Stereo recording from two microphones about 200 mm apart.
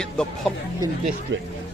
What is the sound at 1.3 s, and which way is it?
Speech, 65° right (ahead or behind).